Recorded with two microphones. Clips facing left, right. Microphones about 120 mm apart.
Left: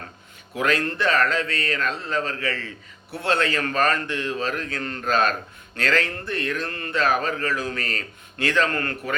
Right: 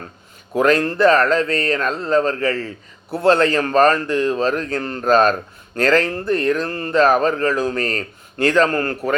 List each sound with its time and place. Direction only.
0.5 s speech: 40° right (ahead or behind)